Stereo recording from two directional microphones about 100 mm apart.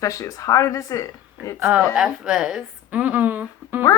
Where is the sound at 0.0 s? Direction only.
35° left (ahead or behind).